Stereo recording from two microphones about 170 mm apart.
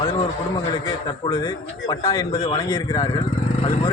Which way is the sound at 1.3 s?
20° left (ahead or behind).